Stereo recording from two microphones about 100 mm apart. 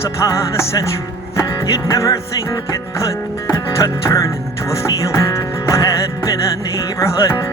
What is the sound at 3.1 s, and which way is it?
Speech, 30° left (ahead or behind).